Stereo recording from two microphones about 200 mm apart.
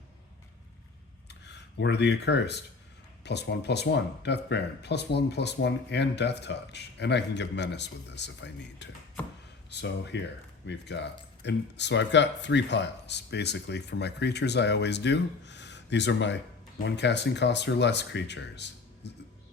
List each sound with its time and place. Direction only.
1.3 s speech: 60° left (ahead or behind)